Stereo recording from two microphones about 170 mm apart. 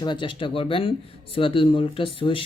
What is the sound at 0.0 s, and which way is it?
Speech, 30° left (ahead or behind).